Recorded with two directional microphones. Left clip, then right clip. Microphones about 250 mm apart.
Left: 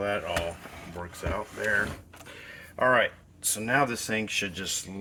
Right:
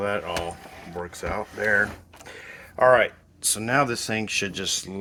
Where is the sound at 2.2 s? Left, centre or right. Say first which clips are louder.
Right 4 dB; right.